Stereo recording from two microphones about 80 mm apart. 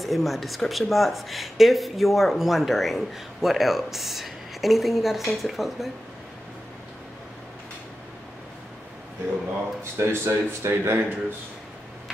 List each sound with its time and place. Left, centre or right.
0.0 s speech: centre
9.9 s speech: right